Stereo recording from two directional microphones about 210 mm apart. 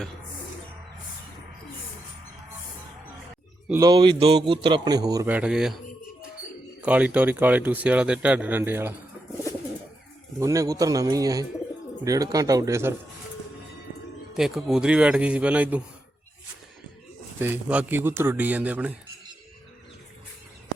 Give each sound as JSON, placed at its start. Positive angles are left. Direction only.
{"t": 3.7, "sound": "a man's voice", "side_deg": -15}
{"t": 6.8, "sound": "speech", "side_deg": -5}
{"t": 10.4, "sound": "speech", "side_deg": -15}
{"t": 14.3, "sound": "speech", "side_deg": 0}
{"t": 17.4, "sound": "speech", "side_deg": -10}